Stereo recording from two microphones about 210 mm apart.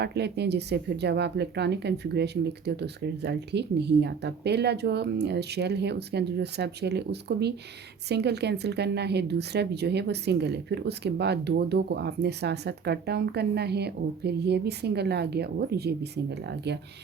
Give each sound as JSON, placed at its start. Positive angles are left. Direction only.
{"t": 0.0, "sound": "a woman's voice", "side_deg": -50}